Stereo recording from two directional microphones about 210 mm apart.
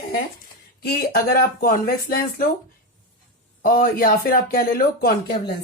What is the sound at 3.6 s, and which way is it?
Speech, 45° left (ahead or behind).